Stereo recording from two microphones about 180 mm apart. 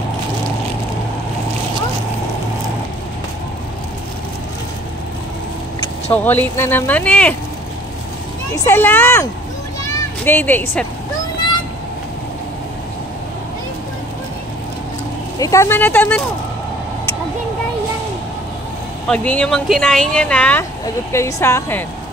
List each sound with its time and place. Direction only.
6.1 s speech: 10° left (ahead or behind)
8.5 s speech: 15° left (ahead or behind)
15.3 s speech: 20° left (ahead or behind)
19.0 s speech: 5° left (ahead or behind)